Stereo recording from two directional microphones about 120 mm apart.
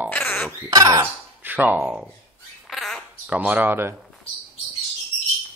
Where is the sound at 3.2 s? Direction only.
10° right (ahead or behind).